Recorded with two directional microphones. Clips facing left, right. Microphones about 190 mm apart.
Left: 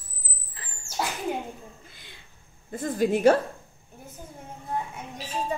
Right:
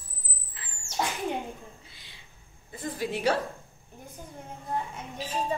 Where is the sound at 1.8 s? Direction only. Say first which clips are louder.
Left 3 dB; 50° left (ahead or behind).